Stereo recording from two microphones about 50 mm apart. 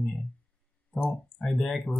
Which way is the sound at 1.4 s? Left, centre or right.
Centre.